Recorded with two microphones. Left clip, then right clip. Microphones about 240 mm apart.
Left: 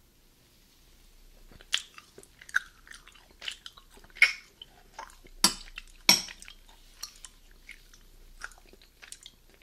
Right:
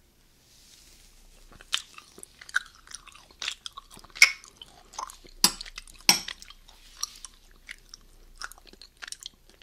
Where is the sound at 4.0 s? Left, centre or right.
Right.